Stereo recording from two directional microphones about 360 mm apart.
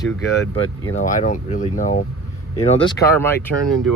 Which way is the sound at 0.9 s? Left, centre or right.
Left.